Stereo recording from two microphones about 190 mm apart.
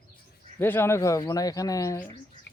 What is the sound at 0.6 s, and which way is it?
Speech, 10° left (ahead or behind).